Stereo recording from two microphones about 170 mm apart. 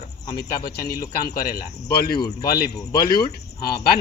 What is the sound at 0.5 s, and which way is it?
A man's voice, 60° left (ahead or behind).